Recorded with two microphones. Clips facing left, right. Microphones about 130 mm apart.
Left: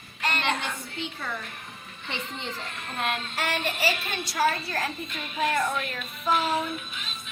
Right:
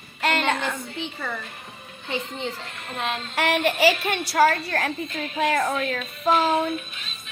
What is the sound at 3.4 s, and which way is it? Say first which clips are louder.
A woman's voice: right 10 dB; 70° right (ahead or behind).